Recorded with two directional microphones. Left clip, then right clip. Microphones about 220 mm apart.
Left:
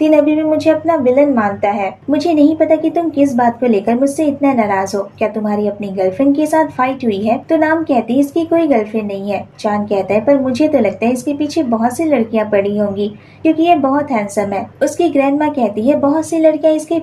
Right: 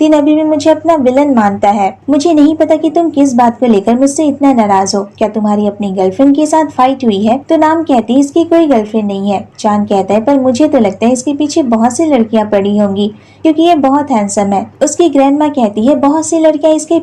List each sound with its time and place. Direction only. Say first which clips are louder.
0.0 s a woman's voice: right 3 dB; 35° right (ahead or behind)